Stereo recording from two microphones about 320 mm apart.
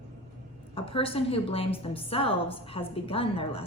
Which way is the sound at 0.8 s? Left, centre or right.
Centre.